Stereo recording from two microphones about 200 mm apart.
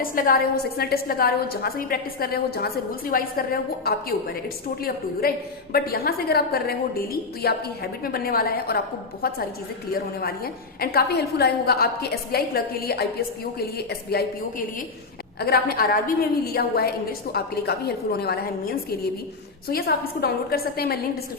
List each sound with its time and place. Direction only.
0.0 s a woman's voice: 45° left (ahead or behind)
15.4 s a woman's voice: 50° left (ahead or behind)